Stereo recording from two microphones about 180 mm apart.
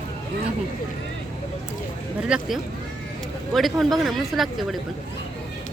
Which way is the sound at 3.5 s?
Centre (ahead or behind).